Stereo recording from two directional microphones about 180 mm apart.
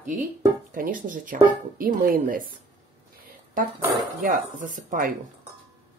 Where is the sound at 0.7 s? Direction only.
50° right (ahead or behind).